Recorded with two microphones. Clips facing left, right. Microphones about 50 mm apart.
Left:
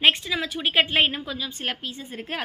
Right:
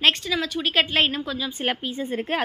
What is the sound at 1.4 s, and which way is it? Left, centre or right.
Speech, centre.